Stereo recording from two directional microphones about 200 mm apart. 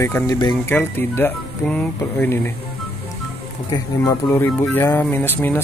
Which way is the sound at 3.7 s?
15° left (ahead or behind).